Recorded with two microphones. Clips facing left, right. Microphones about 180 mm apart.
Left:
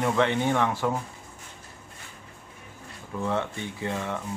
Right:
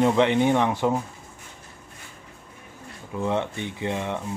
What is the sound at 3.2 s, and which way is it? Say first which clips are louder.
Speech: right 3 dB; 20° right (ahead or behind).